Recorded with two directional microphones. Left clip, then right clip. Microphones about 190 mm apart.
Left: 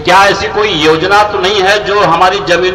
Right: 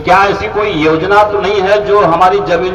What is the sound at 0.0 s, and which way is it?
A man's voice, 55° right (ahead or behind).